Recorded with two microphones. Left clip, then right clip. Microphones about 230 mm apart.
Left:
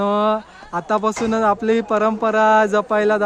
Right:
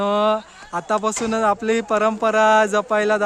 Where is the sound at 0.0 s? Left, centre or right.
Centre.